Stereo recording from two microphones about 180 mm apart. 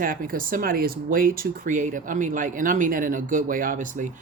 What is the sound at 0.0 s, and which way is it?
Speech, 50° right (ahead or behind).